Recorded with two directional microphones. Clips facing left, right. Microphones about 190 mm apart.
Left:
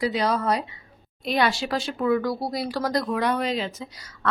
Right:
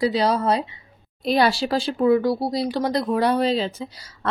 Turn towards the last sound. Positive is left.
turn(degrees=-30)  # may be behind; listen again after turning